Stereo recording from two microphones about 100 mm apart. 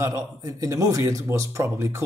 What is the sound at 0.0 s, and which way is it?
Speech, 35° right (ahead or behind).